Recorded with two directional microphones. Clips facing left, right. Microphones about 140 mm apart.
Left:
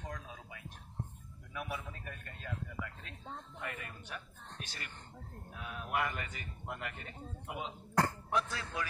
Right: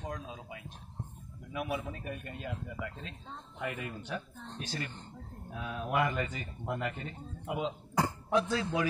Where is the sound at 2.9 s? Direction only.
30° right (ahead or behind).